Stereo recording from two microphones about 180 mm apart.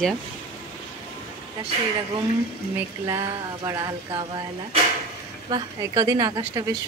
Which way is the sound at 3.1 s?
20° right (ahead or behind).